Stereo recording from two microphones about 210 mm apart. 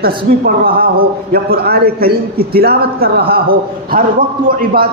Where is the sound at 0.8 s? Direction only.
45° right (ahead or behind).